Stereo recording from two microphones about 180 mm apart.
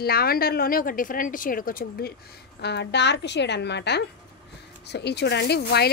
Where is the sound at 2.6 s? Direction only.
70° left (ahead or behind).